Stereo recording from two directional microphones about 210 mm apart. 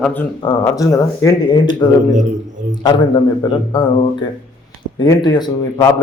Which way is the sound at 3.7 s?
20° left (ahead or behind).